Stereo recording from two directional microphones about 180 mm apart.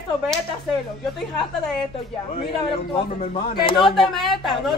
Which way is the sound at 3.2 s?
25° left (ahead or behind).